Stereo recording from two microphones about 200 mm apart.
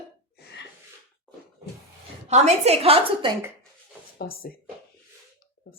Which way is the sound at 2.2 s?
35° right (ahead or behind).